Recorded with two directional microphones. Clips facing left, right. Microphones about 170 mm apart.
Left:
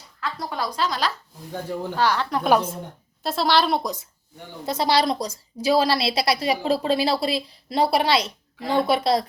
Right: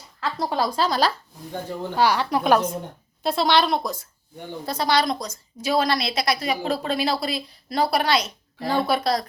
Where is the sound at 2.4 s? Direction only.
10° left (ahead or behind).